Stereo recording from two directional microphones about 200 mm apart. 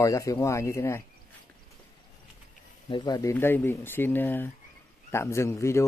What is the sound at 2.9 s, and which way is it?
Speech, 20° left (ahead or behind).